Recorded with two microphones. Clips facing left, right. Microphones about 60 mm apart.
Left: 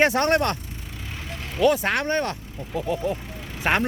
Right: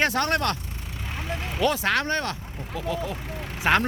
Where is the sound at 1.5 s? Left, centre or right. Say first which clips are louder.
Left 5 dB; centre.